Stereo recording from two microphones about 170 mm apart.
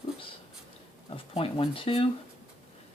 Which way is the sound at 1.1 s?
35° left (ahead or behind).